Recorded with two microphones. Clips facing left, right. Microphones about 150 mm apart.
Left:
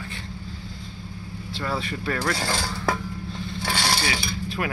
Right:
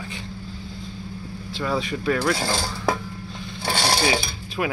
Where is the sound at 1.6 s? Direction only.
10° right (ahead or behind).